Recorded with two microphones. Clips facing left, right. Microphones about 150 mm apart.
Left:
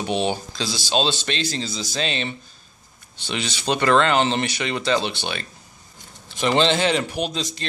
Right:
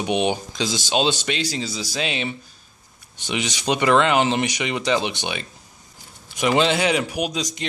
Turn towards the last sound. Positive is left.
turn(degrees=-10)  # may be behind; listen again after turning